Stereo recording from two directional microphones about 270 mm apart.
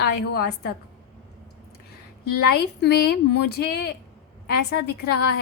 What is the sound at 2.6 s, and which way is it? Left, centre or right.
A woman's voice, left.